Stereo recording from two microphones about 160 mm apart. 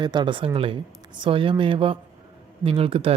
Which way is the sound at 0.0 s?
30° right (ahead or behind).